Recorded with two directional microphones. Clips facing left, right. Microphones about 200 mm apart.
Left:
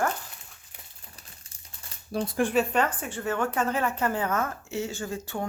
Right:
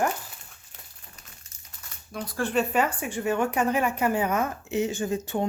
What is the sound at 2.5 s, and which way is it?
A woman's voice, 5° right (ahead or behind).